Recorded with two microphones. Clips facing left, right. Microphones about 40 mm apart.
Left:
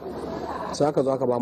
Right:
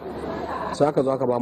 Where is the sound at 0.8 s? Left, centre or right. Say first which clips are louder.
Right 1 dB; right.